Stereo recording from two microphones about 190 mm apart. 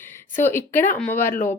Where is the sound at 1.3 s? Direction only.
45° left (ahead or behind).